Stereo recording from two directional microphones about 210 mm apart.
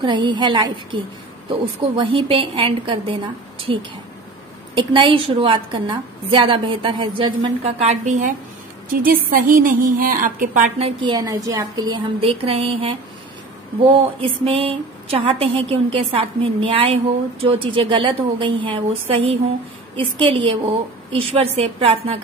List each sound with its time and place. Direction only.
0.0 s speech: 20° right (ahead or behind)